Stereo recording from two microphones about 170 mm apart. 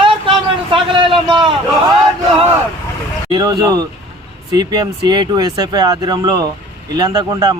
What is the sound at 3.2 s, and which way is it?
Speech, 25° right (ahead or behind).